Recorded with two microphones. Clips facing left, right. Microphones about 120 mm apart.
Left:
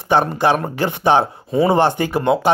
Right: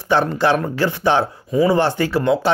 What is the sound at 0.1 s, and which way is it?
Speech, 20° left (ahead or behind).